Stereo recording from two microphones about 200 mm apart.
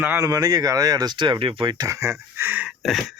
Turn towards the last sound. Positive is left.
turn(degrees=0)  # may be behind; listen again after turning